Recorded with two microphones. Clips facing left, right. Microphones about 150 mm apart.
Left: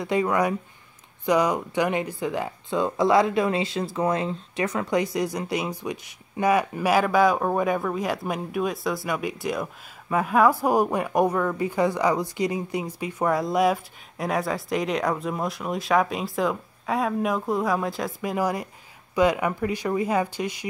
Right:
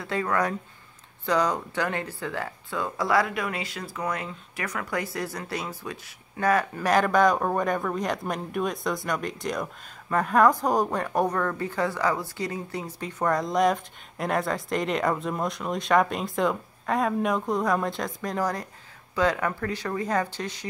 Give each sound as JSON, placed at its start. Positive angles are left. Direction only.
{"t": 0.0, "sound": "speech", "side_deg": 15}